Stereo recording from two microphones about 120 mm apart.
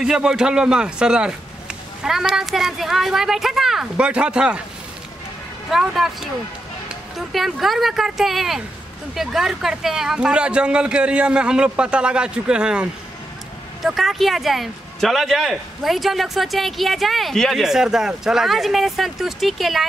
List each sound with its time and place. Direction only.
0.0 s a man's voice: 5° right (ahead or behind)
5.7 s speech: centre (ahead or behind)
7.2 s a man's voice: centre (ahead or behind)
13.8 s speech: centre (ahead or behind)